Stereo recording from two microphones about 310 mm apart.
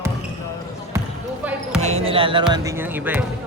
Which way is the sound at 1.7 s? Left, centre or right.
Right.